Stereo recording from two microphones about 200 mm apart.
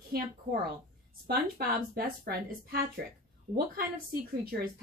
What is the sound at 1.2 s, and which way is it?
A woman's voice, 50° right (ahead or behind).